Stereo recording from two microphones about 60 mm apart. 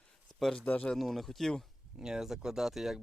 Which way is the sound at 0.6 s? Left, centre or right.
Left.